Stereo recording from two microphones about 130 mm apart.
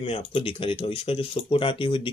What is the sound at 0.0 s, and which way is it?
Speech, 45° left (ahead or behind).